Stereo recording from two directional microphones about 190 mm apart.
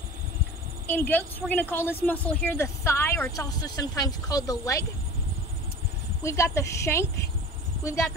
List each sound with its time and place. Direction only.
0.8 s a woman's voice: 10° left (ahead or behind)
6.2 s a woman's voice: 15° left (ahead or behind)